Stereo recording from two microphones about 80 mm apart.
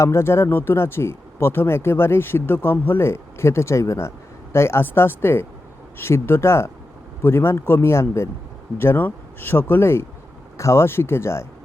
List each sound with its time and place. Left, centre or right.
0.0 s speech: left